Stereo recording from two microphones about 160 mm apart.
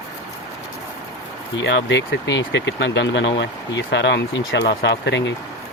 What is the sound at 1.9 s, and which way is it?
Speech, 90° left.